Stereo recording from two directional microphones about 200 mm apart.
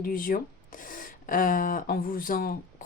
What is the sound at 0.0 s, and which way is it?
Speech, 45° left (ahead or behind).